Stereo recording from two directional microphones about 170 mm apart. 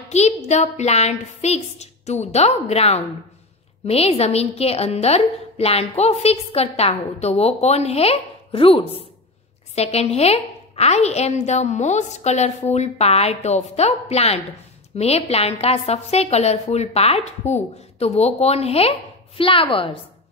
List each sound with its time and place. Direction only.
0.1 s a woman's voice: 40° left (ahead or behind)